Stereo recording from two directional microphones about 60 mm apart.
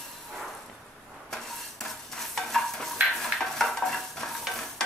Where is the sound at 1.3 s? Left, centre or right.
Centre.